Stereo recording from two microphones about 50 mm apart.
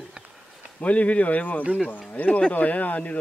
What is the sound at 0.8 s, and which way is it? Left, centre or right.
Speech, left.